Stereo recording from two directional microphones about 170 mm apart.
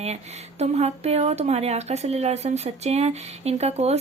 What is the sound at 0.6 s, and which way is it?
A woman's voice, 40° right (ahead or behind).